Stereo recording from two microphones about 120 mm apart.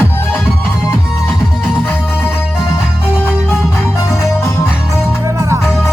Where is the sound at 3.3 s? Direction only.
5° right (ahead or behind).